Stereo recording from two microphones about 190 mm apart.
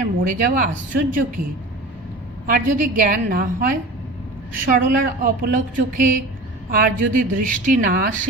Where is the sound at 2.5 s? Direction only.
45° right (ahead or behind).